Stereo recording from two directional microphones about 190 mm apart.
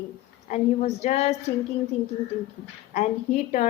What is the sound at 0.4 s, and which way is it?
A woman's voice, 35° left (ahead or behind).